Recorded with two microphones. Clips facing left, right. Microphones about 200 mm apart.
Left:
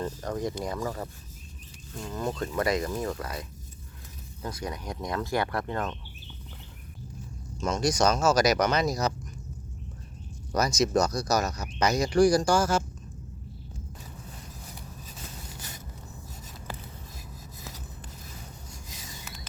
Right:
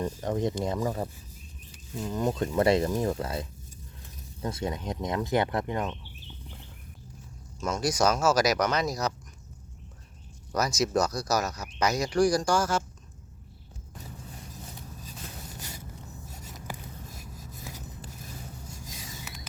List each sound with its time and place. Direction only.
0.0 s speech: 20° right (ahead or behind)
4.4 s speech: 25° right (ahead or behind)
7.6 s speech: 5° right (ahead or behind)
10.5 s speech: 5° right (ahead or behind)